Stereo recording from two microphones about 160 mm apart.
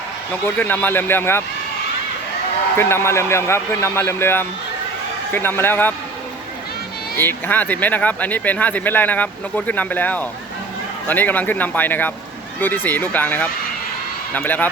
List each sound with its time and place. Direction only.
0.4 s speech: 10° left (ahead or behind)
2.7 s speech: 15° left (ahead or behind)
7.2 s speech: 10° left (ahead or behind)